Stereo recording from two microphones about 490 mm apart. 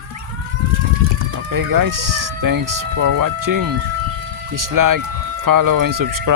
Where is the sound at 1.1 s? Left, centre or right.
Right.